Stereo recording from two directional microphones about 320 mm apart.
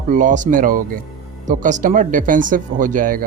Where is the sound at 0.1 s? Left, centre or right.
Right.